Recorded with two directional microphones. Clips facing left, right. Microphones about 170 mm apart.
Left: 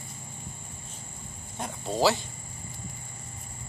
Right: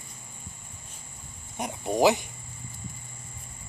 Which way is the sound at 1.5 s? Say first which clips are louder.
Right 3 dB; 15° right (ahead or behind).